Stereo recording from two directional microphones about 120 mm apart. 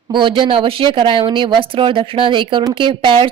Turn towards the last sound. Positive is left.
turn(degrees=-45)  # may be behind; listen again after turning